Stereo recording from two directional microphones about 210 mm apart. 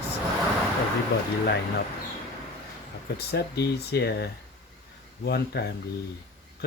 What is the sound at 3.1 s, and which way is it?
Speech, 50° left (ahead or behind).